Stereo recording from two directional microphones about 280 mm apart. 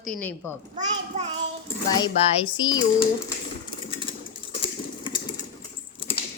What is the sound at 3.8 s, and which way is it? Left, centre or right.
Sewing machine, centre.